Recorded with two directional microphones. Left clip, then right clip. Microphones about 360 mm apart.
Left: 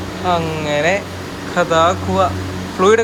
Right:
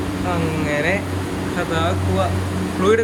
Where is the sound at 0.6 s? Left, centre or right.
Centre.